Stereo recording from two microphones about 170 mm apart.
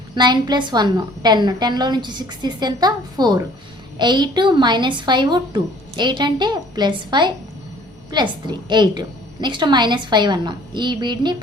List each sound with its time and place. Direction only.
0.2 s speech: 25° right (ahead or behind)